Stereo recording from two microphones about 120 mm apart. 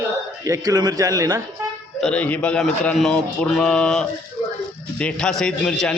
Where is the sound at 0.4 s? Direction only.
30° right (ahead or behind).